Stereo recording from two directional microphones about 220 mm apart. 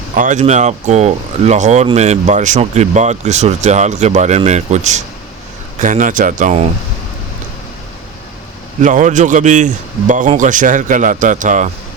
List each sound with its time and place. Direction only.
0.2 s speech: 35° right (ahead or behind)
8.8 s speech: 35° right (ahead or behind)